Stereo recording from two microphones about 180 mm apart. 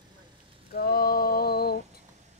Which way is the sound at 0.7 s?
60° left (ahead or behind).